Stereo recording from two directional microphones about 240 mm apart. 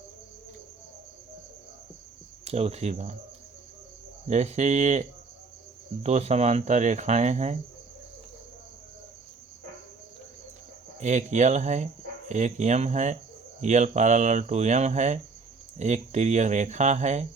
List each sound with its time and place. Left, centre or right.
2.4 s speech: right
4.3 s speech: right
11.0 s speech: right